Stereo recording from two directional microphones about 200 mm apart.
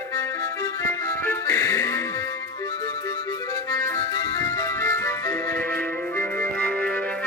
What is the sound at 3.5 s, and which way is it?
Music, 15° left (ahead or behind).